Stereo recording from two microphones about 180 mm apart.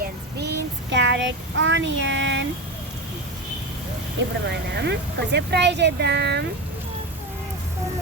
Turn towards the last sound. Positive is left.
turn(degrees=-70)  # may be behind; listen again after turning